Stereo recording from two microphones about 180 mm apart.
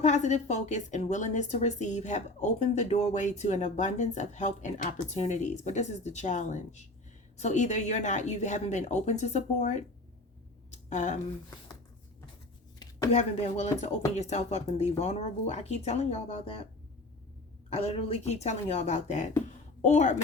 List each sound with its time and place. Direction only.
0.0 s a woman's voice: 40° left (ahead or behind)
10.7 s a sound: 40° left (ahead or behind)
13.1 s a woman's voice: 40° left (ahead or behind)
17.7 s a woman's voice: 35° left (ahead or behind)